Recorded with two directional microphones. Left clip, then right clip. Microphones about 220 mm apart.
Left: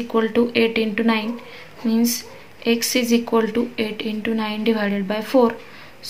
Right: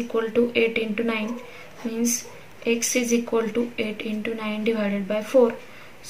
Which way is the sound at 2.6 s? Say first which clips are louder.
Left 3 dB; 35° left (ahead or behind).